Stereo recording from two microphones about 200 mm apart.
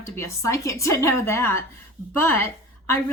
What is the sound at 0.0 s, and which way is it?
A woman's voice, 15° left (ahead or behind).